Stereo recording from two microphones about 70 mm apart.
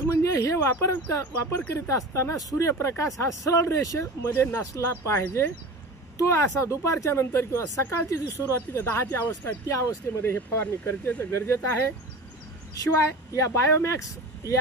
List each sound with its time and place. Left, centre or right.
0.0 s speech: left
4.3 s speech: left
12.9 s speech: left